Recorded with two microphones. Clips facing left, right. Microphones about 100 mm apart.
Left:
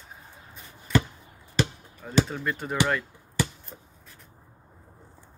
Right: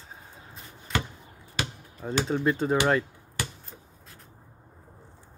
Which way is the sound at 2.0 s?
30° right (ahead or behind).